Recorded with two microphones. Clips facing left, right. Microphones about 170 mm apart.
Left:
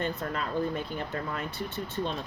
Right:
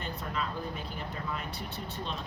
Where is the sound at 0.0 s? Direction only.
45° left (ahead or behind).